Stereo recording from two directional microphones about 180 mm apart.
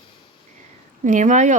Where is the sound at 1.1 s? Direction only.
45° right (ahead or behind).